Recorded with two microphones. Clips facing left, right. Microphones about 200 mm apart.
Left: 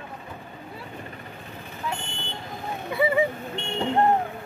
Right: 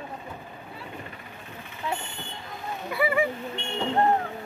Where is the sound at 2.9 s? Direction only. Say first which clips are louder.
Left 3 dB; 20° left (ahead or behind).